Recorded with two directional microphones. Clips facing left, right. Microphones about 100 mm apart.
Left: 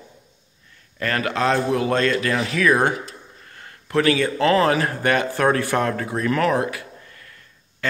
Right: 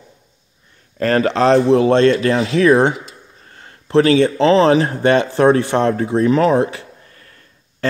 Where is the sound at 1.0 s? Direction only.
35° right (ahead or behind).